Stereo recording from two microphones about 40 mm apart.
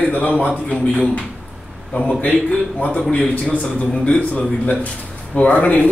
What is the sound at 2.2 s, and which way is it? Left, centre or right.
Speech, left.